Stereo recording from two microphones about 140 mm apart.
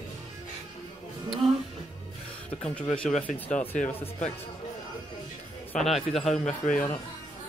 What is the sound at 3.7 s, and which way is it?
Speech, 60° left (ahead or behind).